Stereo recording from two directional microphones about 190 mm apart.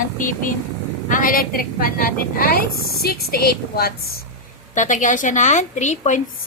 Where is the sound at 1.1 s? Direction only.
45° left (ahead or behind).